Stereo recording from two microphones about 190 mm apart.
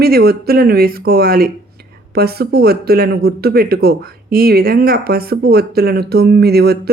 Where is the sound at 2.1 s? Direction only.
55° right (ahead or behind).